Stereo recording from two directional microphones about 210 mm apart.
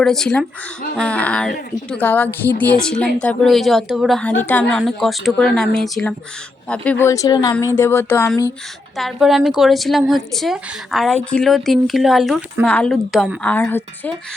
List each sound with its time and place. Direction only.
0.0 s speech: centre (ahead or behind)
9.0 s speech: centre (ahead or behind)